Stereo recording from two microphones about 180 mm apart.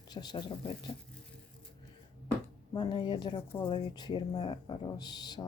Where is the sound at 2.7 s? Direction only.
25° left (ahead or behind).